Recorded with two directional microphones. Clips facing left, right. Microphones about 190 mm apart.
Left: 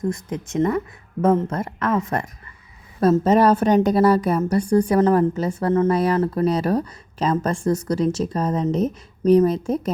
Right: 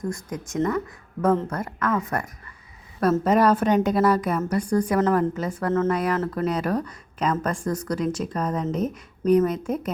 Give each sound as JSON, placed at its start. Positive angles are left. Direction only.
{"t": 0.1, "sound": "a woman's voice", "side_deg": 25}